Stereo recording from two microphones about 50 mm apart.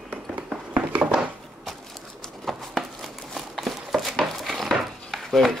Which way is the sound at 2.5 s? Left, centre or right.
Centre.